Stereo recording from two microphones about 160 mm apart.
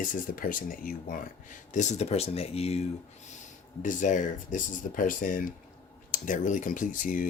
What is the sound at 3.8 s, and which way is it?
Speech, 50° left (ahead or behind).